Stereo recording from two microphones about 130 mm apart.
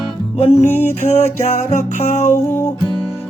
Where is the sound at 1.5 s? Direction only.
60° left (ahead or behind).